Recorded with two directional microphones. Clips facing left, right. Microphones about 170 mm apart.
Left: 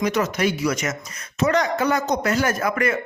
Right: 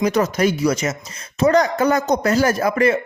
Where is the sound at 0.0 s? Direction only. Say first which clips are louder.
Right 4 dB; 35° right (ahead or behind).